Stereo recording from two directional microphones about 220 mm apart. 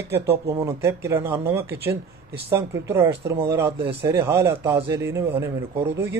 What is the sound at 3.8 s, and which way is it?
Speech, 50° right (ahead or behind).